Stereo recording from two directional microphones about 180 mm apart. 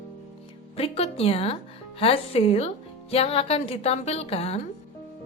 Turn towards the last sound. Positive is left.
turn(degrees=35)  # may be behind; listen again after turning